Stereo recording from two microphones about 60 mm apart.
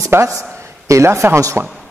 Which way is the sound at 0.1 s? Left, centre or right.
Right.